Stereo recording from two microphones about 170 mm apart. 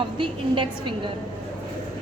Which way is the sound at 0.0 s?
30° right (ahead or behind).